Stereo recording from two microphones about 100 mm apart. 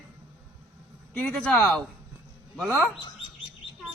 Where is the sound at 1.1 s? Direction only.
10° left (ahead or behind).